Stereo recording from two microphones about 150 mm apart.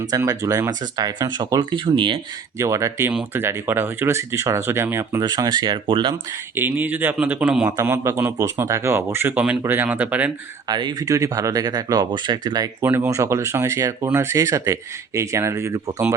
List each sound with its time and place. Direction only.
0.2 s speech: 20° right (ahead or behind)
2.6 s speech: 20° right (ahead or behind)
5.2 s speech: 25° right (ahead or behind)
6.5 s speech: 10° right (ahead or behind)
10.7 s speech: 30° right (ahead or behind)
12.8 s speech: 15° right (ahead or behind)